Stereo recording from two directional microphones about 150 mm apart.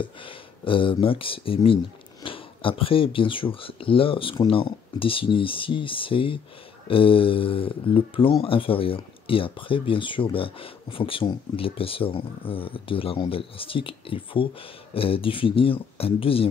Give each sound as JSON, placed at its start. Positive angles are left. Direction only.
{"t": 0.0, "sound": "speech", "side_deg": 35}